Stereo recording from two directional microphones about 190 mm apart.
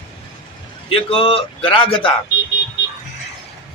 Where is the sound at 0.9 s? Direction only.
30° left (ahead or behind).